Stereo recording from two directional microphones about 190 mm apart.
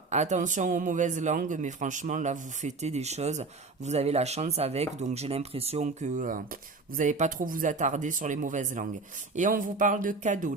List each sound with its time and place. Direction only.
0.1 s a man's voice: 40° right (ahead or behind)